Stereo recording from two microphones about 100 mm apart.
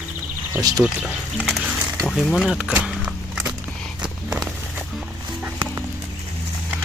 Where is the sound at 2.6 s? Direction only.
10° right (ahead or behind).